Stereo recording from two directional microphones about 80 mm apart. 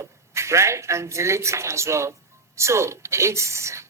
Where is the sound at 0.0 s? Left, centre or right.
Right.